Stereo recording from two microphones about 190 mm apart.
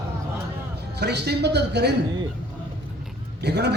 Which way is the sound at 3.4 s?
60° right (ahead or behind).